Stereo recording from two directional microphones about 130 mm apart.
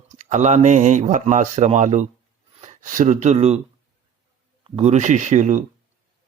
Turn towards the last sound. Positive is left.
turn(degrees=-70)  # may be behind; listen again after turning